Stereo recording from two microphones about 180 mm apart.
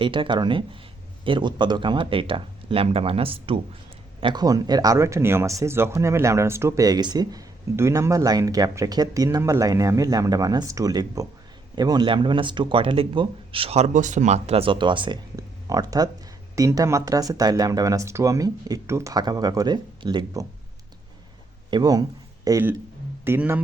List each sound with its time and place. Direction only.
0.0 s speech: 30° right (ahead or behind)
21.7 s speech: 20° right (ahead or behind)